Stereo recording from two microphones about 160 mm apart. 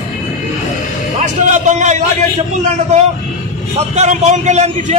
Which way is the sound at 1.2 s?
50° right (ahead or behind).